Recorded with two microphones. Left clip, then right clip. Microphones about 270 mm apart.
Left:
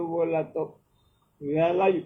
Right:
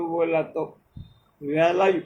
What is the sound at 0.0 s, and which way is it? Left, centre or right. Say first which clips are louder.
Speech: right 3 dB; right.